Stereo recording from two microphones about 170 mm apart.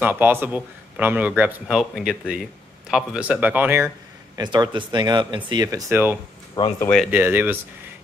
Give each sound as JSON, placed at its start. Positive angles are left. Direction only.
{"t": 0.0, "sound": "a man's voice", "side_deg": -10}
{"t": 4.4, "sound": "speech", "side_deg": -25}
{"t": 6.6, "sound": "speech", "side_deg": 25}
{"t": 7.1, "sound": "a man's voice", "side_deg": -10}